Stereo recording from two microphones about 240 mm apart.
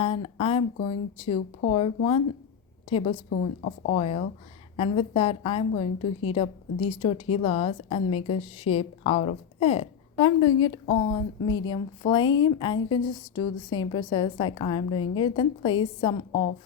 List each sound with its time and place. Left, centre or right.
0.0 s a woman's voice: left
3.2 s a woman's voice: left
11.4 s a woman's voice: left
11.7 s a woman's voice: centre